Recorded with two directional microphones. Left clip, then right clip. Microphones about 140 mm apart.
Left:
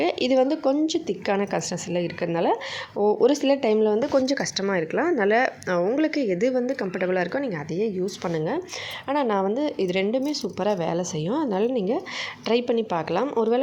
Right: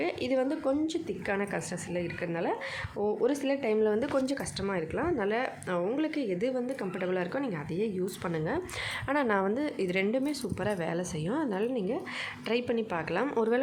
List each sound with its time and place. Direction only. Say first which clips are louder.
0.0 s a woman's voice: left 9 dB; 40° left (ahead or behind)
3.8 s a woman's voice: left 7 dB; 20° left (ahead or behind)
13.2 s speech: left 4 dB; 15° left (ahead or behind)